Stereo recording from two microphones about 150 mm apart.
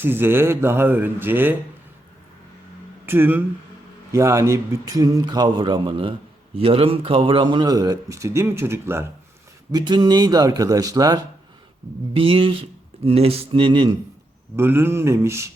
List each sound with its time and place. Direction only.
0.0 s speech: 15° right (ahead or behind)
3.1 s a man's voice: 15° right (ahead or behind)
9.7 s a man's voice: 30° right (ahead or behind)
12.1 s mantra: 35° right (ahead or behind)
14.5 s speech: 15° right (ahead or behind)